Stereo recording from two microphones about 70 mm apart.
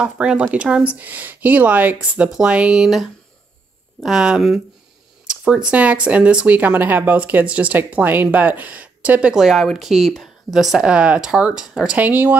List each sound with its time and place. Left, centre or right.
0.0 s speech: centre
9.4 s speech: centre
12.0 s speech: right